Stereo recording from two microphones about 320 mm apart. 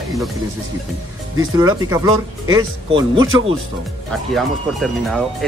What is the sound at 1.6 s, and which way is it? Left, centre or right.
Speech, centre.